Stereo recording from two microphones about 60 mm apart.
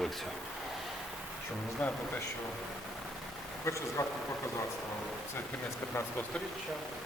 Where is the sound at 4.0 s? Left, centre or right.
Left.